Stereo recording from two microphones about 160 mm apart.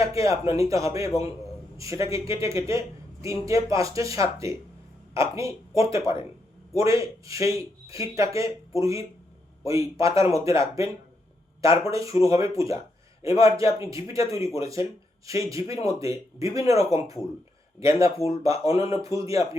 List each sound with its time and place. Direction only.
0.0 s speech: 20° right (ahead or behind)